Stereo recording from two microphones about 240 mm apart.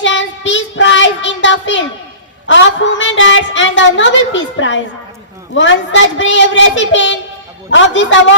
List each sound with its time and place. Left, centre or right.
0.0 s child singing: left
2.5 s a woman's voice: left